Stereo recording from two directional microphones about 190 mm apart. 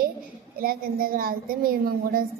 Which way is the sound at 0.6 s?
50° right (ahead or behind).